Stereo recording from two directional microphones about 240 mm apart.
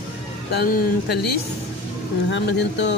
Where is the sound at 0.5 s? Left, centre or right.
Left.